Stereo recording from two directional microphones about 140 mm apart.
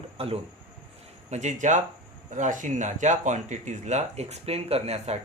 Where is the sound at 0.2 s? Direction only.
45° right (ahead or behind).